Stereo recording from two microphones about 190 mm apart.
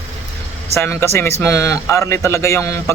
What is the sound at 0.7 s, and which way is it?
A man's voice, 15° left (ahead or behind).